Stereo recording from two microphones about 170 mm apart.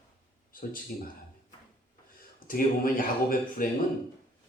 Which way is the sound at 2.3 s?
55° left (ahead or behind).